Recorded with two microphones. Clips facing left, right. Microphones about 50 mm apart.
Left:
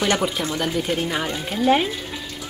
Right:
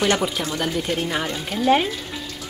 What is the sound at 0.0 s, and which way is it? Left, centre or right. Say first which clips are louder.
Speech: even; centre.